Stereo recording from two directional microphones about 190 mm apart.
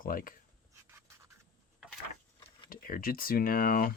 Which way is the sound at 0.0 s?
50° left (ahead or behind).